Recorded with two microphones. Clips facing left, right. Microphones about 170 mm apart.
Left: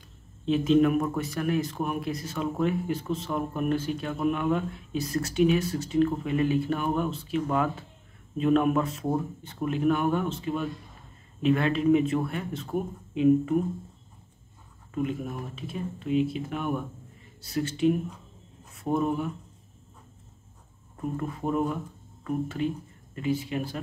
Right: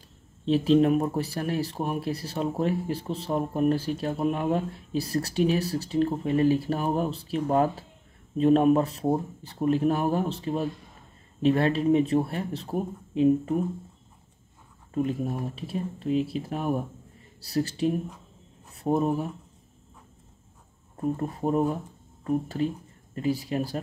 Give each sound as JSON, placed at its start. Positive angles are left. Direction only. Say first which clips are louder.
{"t": 0.5, "sound": "speech", "louder": "right 1 dB", "side_deg": -35}
{"t": 15.0, "sound": "speech", "louder": "right 3 dB", "side_deg": -35}
{"t": 20.9, "sound": "speech", "louder": "right 3 dB", "side_deg": -35}